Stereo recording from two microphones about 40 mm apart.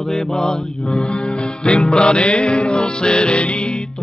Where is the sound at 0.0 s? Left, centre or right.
Centre.